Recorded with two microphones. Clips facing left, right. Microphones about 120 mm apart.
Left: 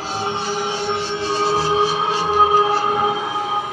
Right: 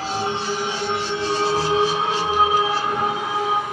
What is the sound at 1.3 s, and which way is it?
Music, 30° left (ahead or behind).